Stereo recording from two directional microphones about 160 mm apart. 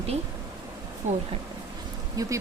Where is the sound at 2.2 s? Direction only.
20° right (ahead or behind).